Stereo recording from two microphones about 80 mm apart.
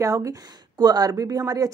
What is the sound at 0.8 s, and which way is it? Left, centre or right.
Speech, right.